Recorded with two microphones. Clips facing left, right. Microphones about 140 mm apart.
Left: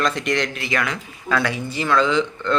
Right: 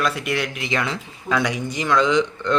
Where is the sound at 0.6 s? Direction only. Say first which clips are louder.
Even; 25° right (ahead or behind).